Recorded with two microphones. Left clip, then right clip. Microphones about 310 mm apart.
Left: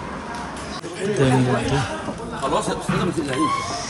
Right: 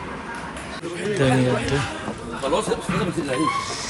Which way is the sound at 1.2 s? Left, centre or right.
Centre.